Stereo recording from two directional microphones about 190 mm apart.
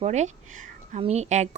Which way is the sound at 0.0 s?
35° right (ahead or behind).